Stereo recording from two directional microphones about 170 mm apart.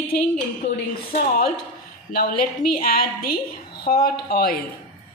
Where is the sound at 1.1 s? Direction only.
60° left (ahead or behind).